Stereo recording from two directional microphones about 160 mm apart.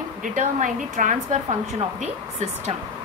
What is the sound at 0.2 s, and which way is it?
A woman's voice, 55° right (ahead or behind).